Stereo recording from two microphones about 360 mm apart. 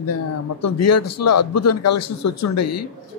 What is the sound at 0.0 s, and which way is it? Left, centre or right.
A man's voice, left.